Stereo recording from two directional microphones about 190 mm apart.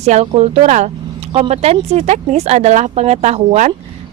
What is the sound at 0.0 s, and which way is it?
Speech, 35° right (ahead or behind).